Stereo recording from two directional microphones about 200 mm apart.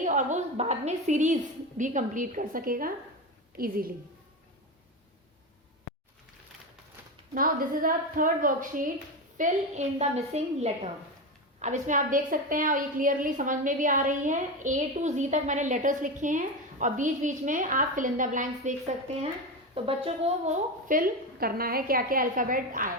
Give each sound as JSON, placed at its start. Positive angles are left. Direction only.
{"t": 0.0, "sound": "a woman's voice", "side_deg": -40}
{"t": 7.3, "sound": "a woman's voice", "side_deg": -45}